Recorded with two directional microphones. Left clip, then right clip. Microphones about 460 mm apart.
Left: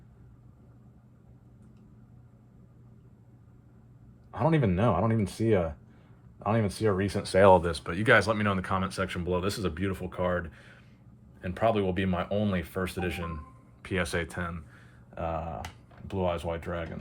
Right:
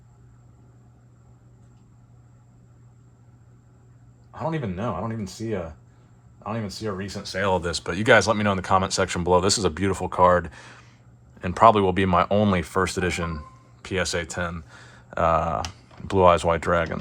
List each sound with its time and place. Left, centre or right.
4.3 s speech: centre